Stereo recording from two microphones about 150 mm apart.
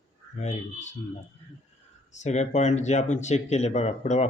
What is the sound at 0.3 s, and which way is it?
Speech, 50° left (ahead or behind).